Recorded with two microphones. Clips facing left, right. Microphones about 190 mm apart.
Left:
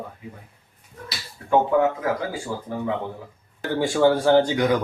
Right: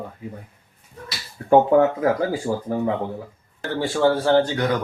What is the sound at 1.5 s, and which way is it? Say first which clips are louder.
Speech: right 4 dB; 35° right (ahead or behind).